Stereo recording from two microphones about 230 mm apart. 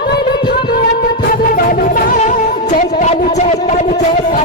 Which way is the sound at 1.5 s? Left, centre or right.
Left.